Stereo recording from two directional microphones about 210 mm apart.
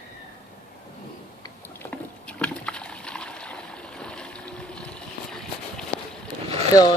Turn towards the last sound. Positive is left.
turn(degrees=20)  # may be behind; listen again after turning